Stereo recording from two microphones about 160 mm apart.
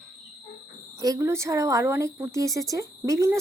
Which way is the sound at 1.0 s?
20° right (ahead or behind).